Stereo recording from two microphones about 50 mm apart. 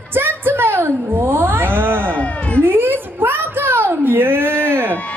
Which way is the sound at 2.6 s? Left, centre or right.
Right.